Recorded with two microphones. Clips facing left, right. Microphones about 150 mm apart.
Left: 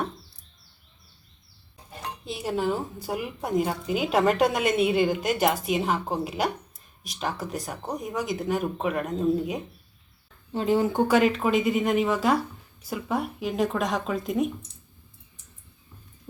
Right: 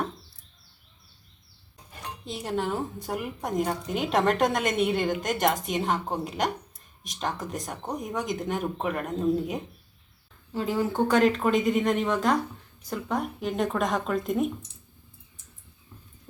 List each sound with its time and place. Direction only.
2.2 s a woman's voice: 5° left (ahead or behind)
10.5 s speech: 25° left (ahead or behind)
11.1 s a woman's voice: 5° left (ahead or behind)